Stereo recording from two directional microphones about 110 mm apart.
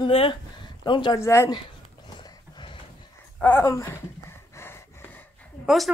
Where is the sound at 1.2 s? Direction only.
25° left (ahead or behind).